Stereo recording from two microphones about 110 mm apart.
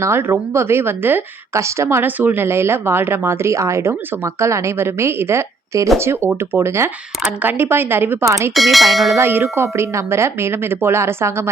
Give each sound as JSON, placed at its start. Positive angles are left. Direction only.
{"t": 0.0, "sound": "a woman's voice", "side_deg": -25}
{"t": 8.5, "sound": "speech", "side_deg": 0}
{"t": 9.1, "sound": "a woman's voice", "side_deg": -25}